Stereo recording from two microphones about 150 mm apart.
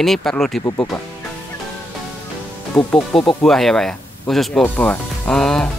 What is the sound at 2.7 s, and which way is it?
Speech, 5° left (ahead or behind).